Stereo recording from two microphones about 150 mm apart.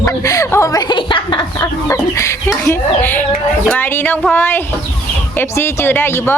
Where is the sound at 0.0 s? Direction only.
20° left (ahead or behind).